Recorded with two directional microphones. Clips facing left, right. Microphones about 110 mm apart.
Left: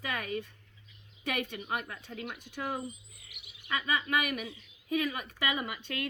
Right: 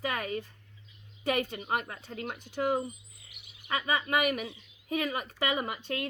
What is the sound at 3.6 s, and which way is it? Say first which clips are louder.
Speech: right 2 dB; 30° right (ahead or behind).